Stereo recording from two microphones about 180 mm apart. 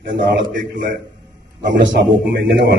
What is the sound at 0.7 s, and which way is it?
Speech, 50° right (ahead or behind).